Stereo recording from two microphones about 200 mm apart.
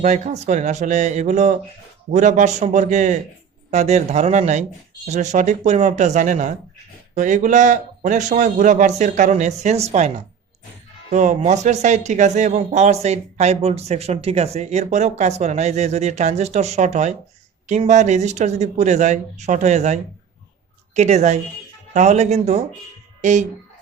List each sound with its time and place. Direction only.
0.0 s speech: 35° right (ahead or behind)
11.1 s speech: 35° right (ahead or behind)